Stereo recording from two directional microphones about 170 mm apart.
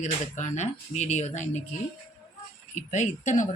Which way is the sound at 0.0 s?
45° left (ahead or behind).